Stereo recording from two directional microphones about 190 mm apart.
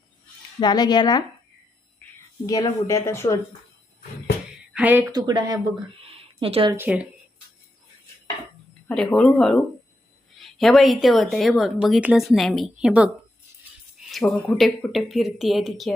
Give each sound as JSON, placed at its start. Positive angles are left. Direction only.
{"t": 0.6, "sound": "speech", "side_deg": 20}
{"t": 2.5, "sound": "speech", "side_deg": 20}
{"t": 4.7, "sound": "speech", "side_deg": -10}
{"t": 5.1, "sound": "speech", "side_deg": -20}
{"t": 6.1, "sound": "a sound", "side_deg": -30}
{"t": 6.7, "sound": "speech", "side_deg": -5}
{"t": 8.9, "sound": "speech", "side_deg": 5}
{"t": 14.1, "sound": "speech", "side_deg": 0}